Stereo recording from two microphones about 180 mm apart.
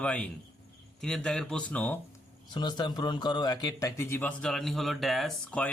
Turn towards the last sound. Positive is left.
turn(degrees=5)  # may be behind; listen again after turning